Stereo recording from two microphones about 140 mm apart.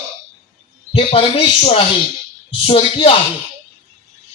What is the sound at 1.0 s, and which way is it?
Speech, 40° left (ahead or behind).